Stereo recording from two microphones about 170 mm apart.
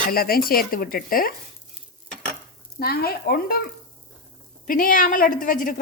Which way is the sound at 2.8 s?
65° left (ahead or behind).